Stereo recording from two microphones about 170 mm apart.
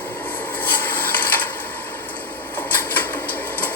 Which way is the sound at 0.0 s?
10° left (ahead or behind).